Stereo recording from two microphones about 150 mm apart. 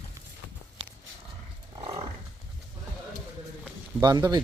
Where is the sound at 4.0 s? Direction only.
25° right (ahead or behind).